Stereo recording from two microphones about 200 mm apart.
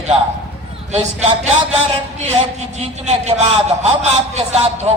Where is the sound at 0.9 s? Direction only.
35° right (ahead or behind).